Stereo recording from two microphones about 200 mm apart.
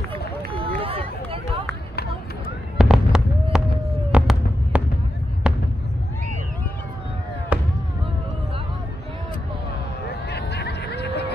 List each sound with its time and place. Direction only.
0.6 s run: 30° right (ahead or behind)
2.8 s fireworks: centre (ahead or behind)
7.5 s fireworks: 5° right (ahead or behind)
10.0 s a sound: 55° left (ahead or behind)